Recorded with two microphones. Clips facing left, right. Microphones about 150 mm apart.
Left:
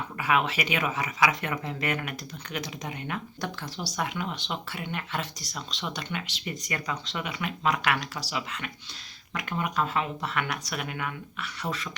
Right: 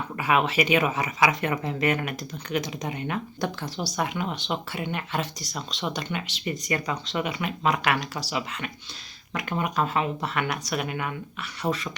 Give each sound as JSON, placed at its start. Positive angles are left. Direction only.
{"t": 0.2, "sound": "speech", "side_deg": -25}